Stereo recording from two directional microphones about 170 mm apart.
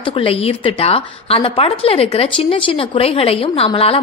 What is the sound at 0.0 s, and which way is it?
A woman's voice, 35° left (ahead or behind).